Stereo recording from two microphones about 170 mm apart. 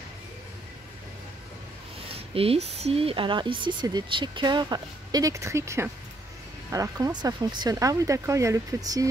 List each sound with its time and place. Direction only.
2.1 s speech: 35° right (ahead or behind); by 9.0 s 20° right (ahead or behind)